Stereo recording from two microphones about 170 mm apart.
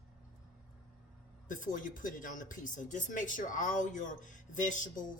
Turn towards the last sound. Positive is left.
turn(degrees=50)  # may be behind; listen again after turning